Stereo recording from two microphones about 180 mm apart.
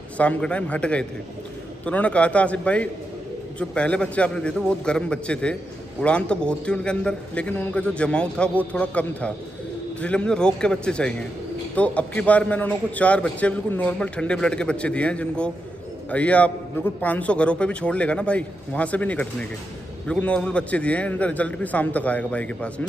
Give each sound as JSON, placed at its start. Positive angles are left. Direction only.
{"t": 0.2, "sound": "a man's voice", "side_deg": 5}